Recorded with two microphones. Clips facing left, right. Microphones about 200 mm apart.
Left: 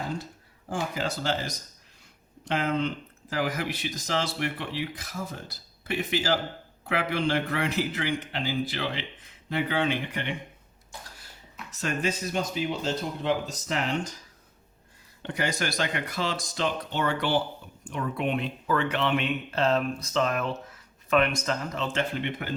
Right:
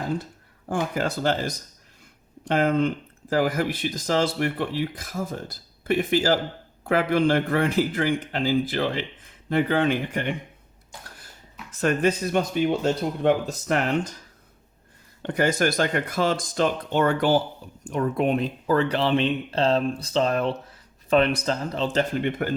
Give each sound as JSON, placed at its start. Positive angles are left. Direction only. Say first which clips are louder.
{"t": 0.7, "sound": "speech", "louder": "right 5 dB", "side_deg": -55}
{"t": 11.8, "sound": "speech", "louder": "right 7 dB", "side_deg": -55}
{"t": 15.2, "sound": "speech", "louder": "right 8 dB", "side_deg": -50}